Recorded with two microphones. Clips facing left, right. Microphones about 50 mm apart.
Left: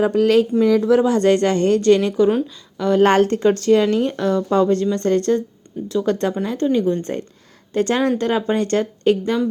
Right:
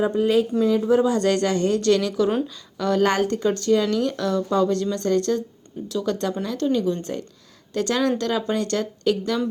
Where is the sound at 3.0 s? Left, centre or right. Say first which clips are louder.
Left 7 dB; left.